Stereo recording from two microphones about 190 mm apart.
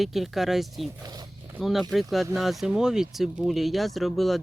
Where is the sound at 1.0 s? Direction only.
20° right (ahead or behind).